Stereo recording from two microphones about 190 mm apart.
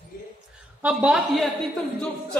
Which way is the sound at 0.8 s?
5° right (ahead or behind).